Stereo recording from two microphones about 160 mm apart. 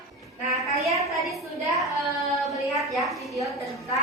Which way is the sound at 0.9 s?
20° right (ahead or behind).